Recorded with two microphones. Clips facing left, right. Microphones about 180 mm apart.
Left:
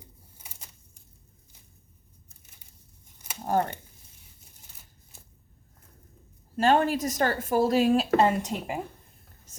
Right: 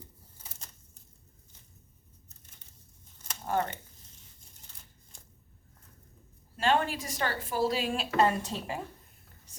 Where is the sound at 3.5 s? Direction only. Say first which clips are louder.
Left 4 dB; 45° left (ahead or behind).